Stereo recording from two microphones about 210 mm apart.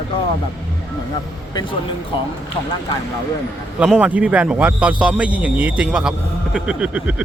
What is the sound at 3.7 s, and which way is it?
A man's voice, 5° right (ahead or behind).